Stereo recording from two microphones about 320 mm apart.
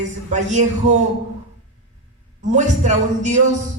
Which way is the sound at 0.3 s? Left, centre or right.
Right.